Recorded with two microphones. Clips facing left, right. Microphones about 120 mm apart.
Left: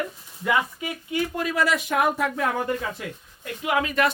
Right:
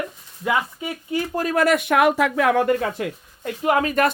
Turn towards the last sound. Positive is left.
turn(degrees=-45)  # may be behind; listen again after turning